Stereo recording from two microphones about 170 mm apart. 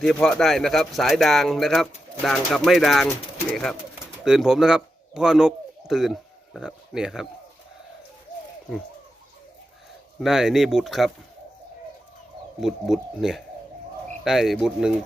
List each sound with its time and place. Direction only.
0.0 s speech: 5° left (ahead or behind)
10.2 s speech: centre (ahead or behind)
12.5 s speech: centre (ahead or behind)